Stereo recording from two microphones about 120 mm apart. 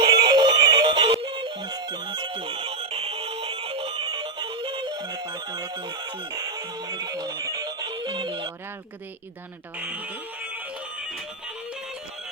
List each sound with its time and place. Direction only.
0.0 s music: 40° right (ahead or behind)
6.3 s music: 35° right (ahead or behind)
7.0 s speech: 35° right (ahead or behind)